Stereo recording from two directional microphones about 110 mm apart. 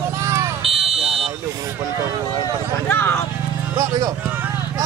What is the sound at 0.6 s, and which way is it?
Car alarm, 60° right (ahead or behind).